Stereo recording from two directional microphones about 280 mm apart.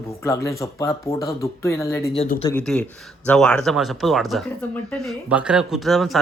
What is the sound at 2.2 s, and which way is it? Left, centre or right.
Speech, left.